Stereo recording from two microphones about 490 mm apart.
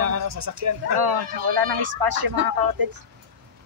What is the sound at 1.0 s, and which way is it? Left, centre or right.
Speech, right.